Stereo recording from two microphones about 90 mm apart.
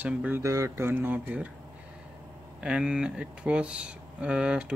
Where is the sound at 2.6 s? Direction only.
10° right (ahead or behind).